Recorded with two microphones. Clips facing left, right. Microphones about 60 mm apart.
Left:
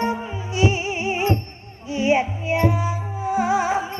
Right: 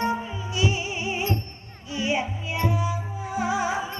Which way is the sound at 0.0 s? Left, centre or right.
Left.